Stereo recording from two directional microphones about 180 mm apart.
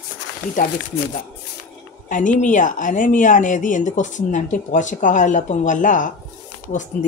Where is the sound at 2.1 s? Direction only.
45° left (ahead or behind).